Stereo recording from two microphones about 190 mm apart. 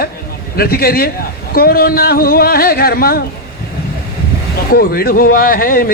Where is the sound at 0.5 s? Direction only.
50° left (ahead or behind).